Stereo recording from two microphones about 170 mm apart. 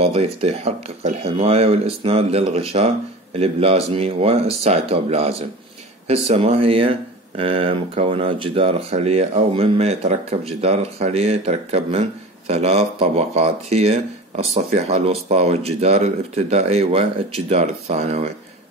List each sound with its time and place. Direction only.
0.0 s speech: 35° right (ahead or behind)